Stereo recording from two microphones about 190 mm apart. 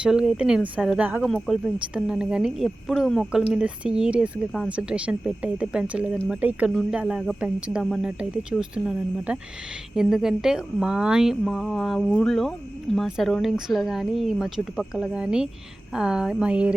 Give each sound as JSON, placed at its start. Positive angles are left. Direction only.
{"t": 0.0, "sound": "speech", "side_deg": -5}